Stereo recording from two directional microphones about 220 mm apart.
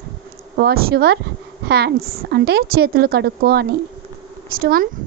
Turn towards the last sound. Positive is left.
turn(degrees=-40)  # may be behind; listen again after turning